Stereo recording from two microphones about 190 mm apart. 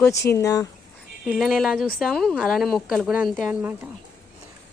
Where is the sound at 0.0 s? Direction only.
15° left (ahead or behind).